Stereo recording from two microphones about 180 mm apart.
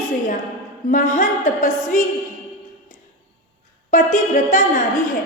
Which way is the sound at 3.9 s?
45° left (ahead or behind).